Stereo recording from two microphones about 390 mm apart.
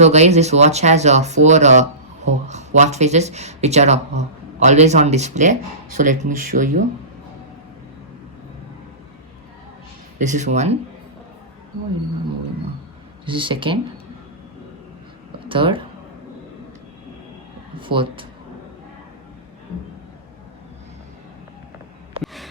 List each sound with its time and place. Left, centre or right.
0.0 s speech: centre
10.2 s speech: centre
13.2 s speech: centre
15.4 s speech: centre
17.7 s speech: centre
22.2 s a sound: centre